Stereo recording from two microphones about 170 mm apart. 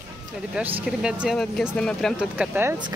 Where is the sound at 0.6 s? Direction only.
5° right (ahead or behind).